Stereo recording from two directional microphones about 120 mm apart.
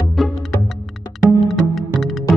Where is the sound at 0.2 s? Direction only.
Centre (ahead or behind).